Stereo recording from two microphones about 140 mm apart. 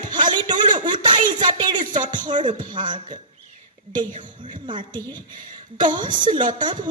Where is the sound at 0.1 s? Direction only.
35° right (ahead or behind).